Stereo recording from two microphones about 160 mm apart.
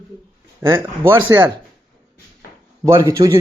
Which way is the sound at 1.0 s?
15° right (ahead or behind).